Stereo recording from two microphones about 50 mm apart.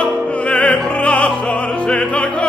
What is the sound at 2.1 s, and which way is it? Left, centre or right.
Music, left.